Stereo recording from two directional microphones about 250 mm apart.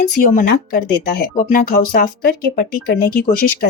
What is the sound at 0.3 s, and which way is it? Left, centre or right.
A woman's voice, left.